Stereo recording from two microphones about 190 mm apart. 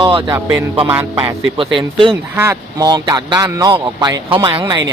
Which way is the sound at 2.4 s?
15° right (ahead or behind).